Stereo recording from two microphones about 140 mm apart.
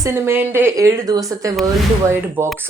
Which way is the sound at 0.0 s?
15° right (ahead or behind).